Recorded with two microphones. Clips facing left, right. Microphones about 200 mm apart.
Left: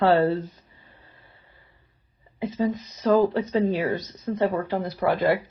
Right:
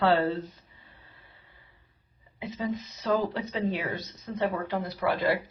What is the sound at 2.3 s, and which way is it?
Speech, 40° left (ahead or behind).